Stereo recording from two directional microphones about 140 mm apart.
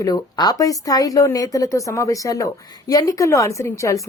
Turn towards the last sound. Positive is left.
turn(degrees=20)  # may be behind; listen again after turning